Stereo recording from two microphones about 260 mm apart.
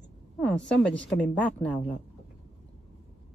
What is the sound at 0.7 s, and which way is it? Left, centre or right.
A woman's voice, centre.